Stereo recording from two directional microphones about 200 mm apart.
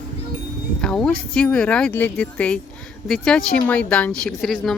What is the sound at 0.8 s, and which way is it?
Speech, 5° left (ahead or behind).